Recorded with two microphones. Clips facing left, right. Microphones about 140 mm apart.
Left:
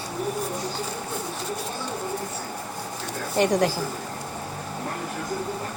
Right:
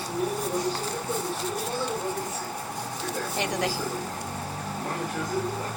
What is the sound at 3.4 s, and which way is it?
Speech, 45° left (ahead or behind).